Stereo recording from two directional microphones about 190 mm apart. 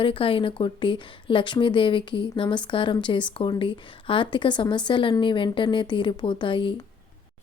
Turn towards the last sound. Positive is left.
turn(degrees=25)  # may be behind; listen again after turning